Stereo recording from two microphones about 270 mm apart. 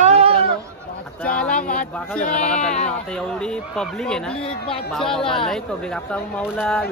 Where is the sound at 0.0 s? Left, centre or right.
Right.